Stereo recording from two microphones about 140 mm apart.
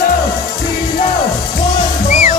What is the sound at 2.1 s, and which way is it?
Music, 60° left (ahead or behind).